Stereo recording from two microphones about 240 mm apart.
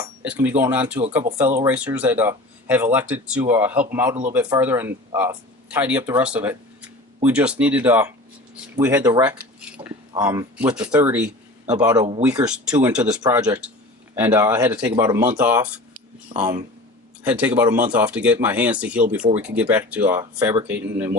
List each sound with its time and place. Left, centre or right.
0.0 s speech: centre
9.6 s a sound: centre
10.1 s speech: centre
16.3 s speech: right
17.2 s speech: centre